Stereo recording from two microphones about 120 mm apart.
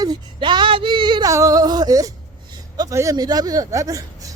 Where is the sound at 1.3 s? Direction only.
30° right (ahead or behind).